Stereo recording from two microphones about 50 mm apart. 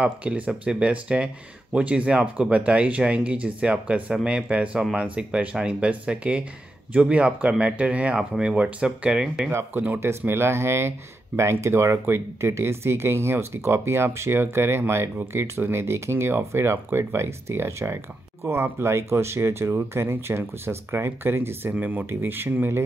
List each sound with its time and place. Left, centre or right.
0.0 s speech: right
9.5 s speech: right
21.7 s speech: right
22.2 s speech: right